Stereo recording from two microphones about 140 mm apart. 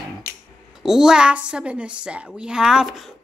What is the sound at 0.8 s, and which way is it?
A woman's voice, 5° right (ahead or behind).